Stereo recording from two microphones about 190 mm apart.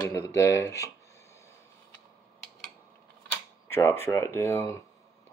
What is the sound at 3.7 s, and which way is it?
Speech, 10° left (ahead or behind).